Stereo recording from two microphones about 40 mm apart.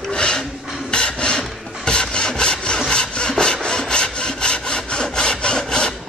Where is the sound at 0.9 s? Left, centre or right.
Left.